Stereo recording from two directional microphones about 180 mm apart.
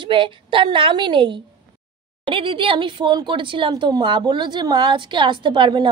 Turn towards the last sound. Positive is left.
turn(degrees=-25)  # may be behind; listen again after turning